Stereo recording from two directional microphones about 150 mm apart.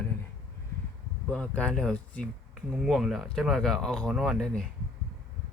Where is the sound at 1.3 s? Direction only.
10° left (ahead or behind).